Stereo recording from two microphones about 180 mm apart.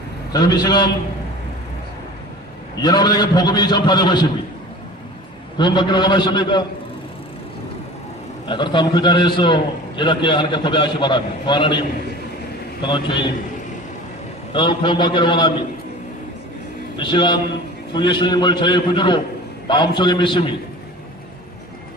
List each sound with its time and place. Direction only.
0.3 s a man's voice: 20° left (ahead or behind)
2.8 s a man's voice: 25° left (ahead or behind)
5.5 s a man's voice: 25° left (ahead or behind)
8.4 s a man's voice: 25° left (ahead or behind)
12.8 s a man's voice: 25° left (ahead or behind)
14.5 s a man's voice: 25° left (ahead or behind)
17.0 s a man's voice: 25° left (ahead or behind)